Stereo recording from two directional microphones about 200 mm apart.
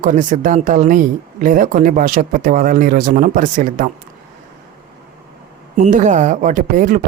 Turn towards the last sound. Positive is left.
turn(degrees=-40)  # may be behind; listen again after turning